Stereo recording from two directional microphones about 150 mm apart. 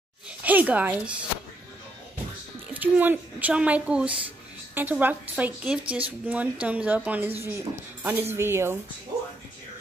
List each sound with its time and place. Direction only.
0.4 s a woman's voice: 10° right (ahead or behind)
2.7 s a woman's voice: 10° right (ahead or behind)